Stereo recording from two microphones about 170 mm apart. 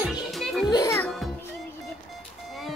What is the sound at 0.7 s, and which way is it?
Speech, 20° left (ahead or behind).